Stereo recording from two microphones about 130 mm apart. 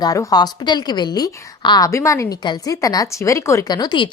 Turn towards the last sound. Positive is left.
turn(degrees=35)  # may be behind; listen again after turning